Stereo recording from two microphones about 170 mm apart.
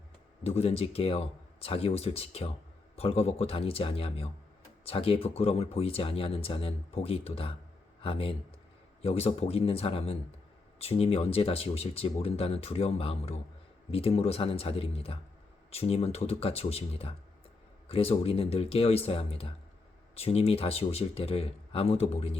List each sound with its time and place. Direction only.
0.4 s speech: 35° left (ahead or behind)